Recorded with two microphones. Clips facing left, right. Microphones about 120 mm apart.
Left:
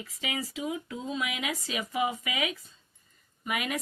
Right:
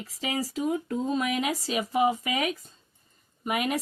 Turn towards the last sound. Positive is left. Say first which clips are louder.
# right 5 dB
turn(degrees=-35)  # may be behind; listen again after turning